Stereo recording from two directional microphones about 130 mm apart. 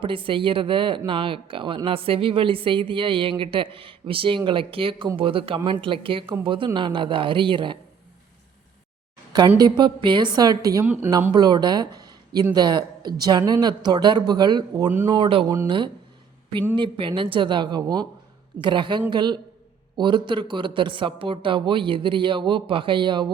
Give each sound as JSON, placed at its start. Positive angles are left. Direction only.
{"t": 0.0, "sound": "speech", "side_deg": -40}
{"t": 9.6, "sound": "speech", "side_deg": -35}
{"t": 10.8, "sound": "speech", "side_deg": -10}
{"t": 11.1, "sound": "speech", "side_deg": -30}
{"t": 16.7, "sound": "speech", "side_deg": -40}